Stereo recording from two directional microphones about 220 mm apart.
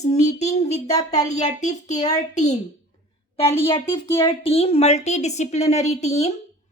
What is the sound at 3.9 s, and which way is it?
Speech, 15° left (ahead or behind).